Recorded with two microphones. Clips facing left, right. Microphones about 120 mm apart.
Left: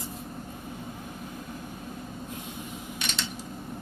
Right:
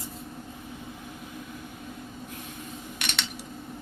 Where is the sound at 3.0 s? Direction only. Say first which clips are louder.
Right 1 dB; 65° right (ahead or behind).